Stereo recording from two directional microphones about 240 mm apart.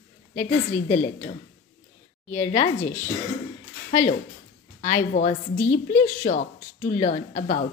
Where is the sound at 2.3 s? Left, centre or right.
Left.